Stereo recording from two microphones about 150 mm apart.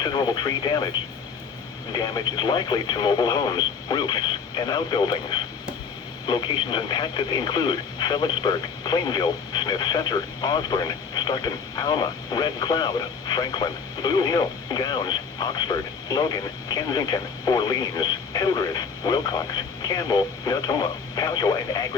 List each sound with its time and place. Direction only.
0.0 s speech: 25° left (ahead or behind)
1.9 s speech: 25° left (ahead or behind)